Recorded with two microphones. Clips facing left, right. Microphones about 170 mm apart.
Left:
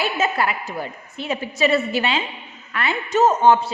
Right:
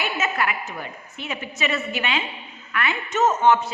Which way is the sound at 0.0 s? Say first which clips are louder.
Left 4 dB; 30° left (ahead or behind).